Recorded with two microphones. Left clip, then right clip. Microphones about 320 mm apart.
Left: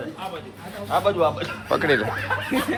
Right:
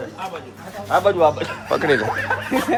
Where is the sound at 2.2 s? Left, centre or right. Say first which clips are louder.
Right 4 dB; right.